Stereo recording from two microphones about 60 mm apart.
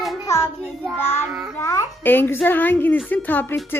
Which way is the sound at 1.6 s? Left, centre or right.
Left.